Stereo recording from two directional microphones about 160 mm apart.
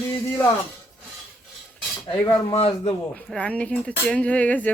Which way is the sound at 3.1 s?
5° left (ahead or behind).